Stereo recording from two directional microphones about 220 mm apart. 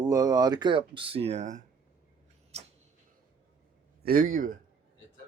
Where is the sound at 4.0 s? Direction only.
40° right (ahead or behind).